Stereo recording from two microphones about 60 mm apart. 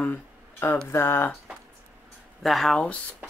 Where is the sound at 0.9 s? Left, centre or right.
Left.